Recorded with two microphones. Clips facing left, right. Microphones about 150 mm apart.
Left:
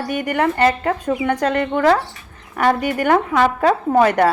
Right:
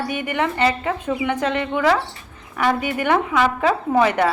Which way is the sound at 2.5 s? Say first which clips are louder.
Left 3 dB; 45° left (ahead or behind).